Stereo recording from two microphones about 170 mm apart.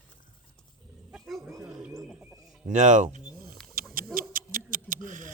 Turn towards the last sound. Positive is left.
turn(degrees=-50)  # may be behind; listen again after turning